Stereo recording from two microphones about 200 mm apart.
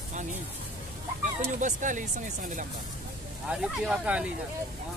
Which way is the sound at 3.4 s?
5° right (ahead or behind).